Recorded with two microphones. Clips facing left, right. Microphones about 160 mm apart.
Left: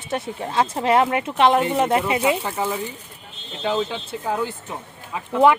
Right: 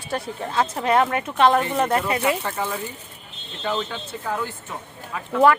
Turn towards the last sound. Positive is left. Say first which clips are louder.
# left 1 dB
turn(degrees=15)  # may be behind; listen again after turning